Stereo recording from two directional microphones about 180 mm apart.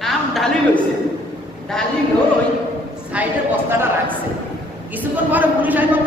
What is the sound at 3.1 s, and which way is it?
Speech, 5° right (ahead or behind).